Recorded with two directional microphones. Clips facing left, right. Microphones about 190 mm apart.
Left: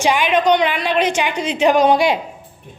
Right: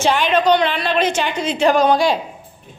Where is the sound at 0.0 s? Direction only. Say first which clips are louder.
Even; 10° left (ahead or behind).